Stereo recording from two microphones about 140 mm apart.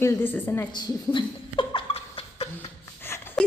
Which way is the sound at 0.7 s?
35° left (ahead or behind).